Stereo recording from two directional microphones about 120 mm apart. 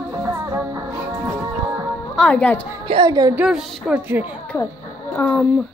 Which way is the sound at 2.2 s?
10° left (ahead or behind).